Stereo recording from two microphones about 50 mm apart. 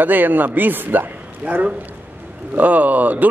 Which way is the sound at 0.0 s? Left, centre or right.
Right.